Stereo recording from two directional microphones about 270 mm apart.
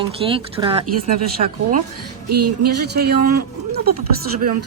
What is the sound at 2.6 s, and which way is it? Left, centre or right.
Speech, right.